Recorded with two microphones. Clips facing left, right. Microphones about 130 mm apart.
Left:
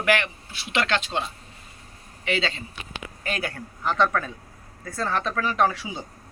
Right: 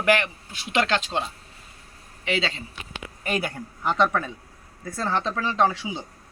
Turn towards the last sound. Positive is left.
turn(degrees=-20)  # may be behind; listen again after turning